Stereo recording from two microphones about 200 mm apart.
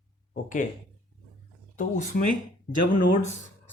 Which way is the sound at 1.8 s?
45° left (ahead or behind).